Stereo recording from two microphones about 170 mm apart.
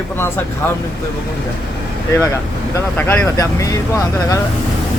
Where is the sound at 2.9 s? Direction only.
10° left (ahead or behind).